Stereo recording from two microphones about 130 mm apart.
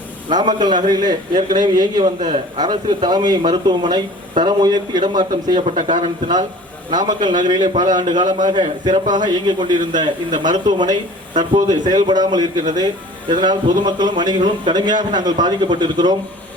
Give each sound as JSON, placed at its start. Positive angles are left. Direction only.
{"t": 0.3, "sound": "a man's voice", "side_deg": -35}
{"t": 5.5, "sound": "speech", "side_deg": -65}
{"t": 6.0, "sound": "a man's voice", "side_deg": -35}